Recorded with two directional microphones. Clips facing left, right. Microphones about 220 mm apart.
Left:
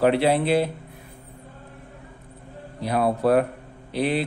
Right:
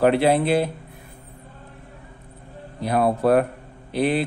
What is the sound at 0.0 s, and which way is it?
Speech, 50° right (ahead or behind).